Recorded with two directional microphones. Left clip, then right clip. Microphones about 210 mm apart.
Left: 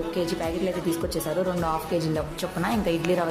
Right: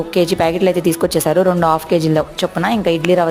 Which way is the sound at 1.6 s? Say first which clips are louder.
Right 12 dB; 35° right (ahead or behind).